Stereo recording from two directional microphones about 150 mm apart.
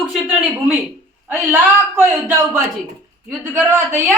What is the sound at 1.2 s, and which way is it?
A woman's voice, 15° right (ahead or behind).